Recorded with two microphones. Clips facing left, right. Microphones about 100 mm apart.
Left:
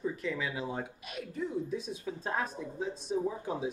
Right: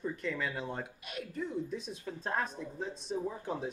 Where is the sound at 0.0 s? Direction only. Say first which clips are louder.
Left 1 dB; centre (ahead or behind).